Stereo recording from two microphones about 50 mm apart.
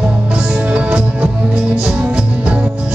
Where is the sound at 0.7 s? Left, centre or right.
Right.